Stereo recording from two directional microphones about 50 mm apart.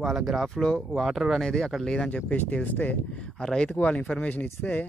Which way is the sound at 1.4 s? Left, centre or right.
Centre.